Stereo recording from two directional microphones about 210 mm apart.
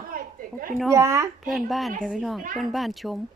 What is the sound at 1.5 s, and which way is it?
Speech, centre (ahead or behind).